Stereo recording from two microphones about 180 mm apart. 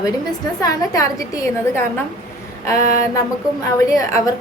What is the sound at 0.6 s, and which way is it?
A woman's voice, 20° left (ahead or behind).